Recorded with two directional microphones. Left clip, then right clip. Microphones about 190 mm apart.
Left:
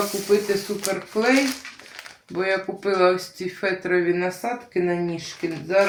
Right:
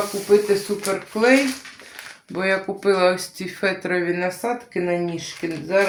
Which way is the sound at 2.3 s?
45° right (ahead or behind).